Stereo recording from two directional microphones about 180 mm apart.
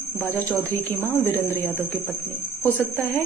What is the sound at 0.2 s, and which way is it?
Speech, 10° left (ahead or behind).